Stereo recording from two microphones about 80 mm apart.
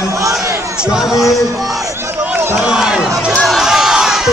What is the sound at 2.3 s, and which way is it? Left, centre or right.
Run, right.